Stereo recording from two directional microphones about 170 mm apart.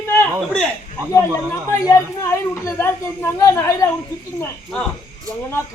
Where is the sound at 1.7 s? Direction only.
20° left (ahead or behind).